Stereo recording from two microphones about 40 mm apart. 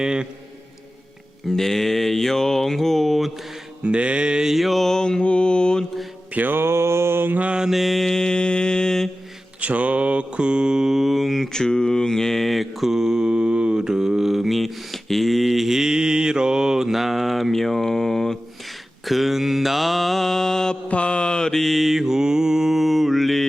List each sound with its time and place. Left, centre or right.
0.0 s mantra: centre
1.5 s a sound: centre
3.8 s mantra: right
4.4 s mantra: centre
4.9 s mantra: centre
6.5 s mantra: right
7.7 s mantra: centre
9.6 s mantra: right; by 10.9 s centre
10.9 s mantra: centre
11.4 s mantra: centre
12.9 s mantra: centre
20.8 s mantra: left
21.6 s mantra: centre